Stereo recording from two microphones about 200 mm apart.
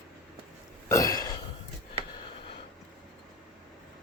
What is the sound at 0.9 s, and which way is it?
Throat clearing, 15° left (ahead or behind).